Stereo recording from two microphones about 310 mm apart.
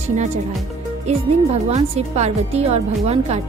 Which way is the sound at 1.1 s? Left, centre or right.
Right.